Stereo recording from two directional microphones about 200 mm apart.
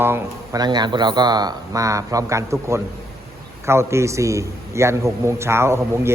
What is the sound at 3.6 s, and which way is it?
A man's voice, 15° right (ahead or behind).